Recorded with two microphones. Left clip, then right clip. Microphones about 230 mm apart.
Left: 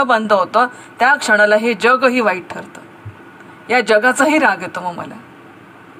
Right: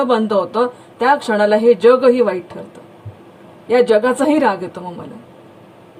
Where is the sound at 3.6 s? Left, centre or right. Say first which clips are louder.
Even; left.